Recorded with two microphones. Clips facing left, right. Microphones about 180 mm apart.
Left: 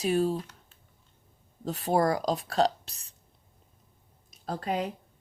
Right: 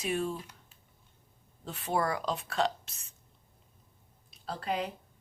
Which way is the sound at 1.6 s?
40° left (ahead or behind).